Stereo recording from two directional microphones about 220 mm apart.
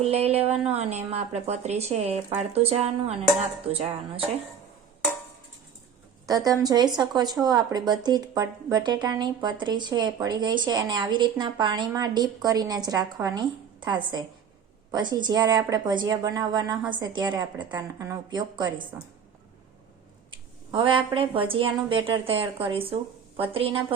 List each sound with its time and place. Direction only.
0.0 s speech: 30° right (ahead or behind)
6.2 s speech: 15° right (ahead or behind)
20.7 s speech: 25° right (ahead or behind)